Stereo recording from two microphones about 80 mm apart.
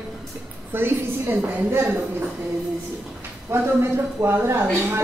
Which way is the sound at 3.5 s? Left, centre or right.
Right.